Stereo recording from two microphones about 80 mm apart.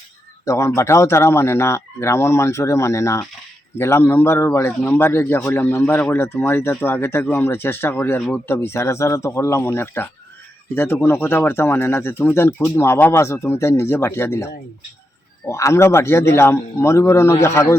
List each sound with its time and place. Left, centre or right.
0.4 s speech: left